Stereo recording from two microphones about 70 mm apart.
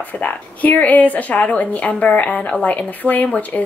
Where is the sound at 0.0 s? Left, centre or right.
Left.